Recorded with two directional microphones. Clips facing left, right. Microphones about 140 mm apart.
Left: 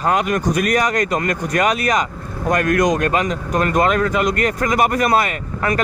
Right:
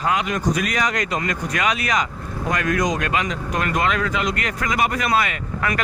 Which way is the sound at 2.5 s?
55° left (ahead or behind).